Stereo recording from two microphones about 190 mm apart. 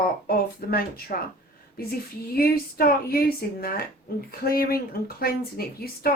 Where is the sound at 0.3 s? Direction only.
50° left (ahead or behind).